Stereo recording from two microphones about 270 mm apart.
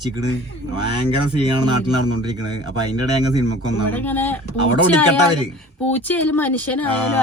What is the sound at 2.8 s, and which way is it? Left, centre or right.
Speech, centre.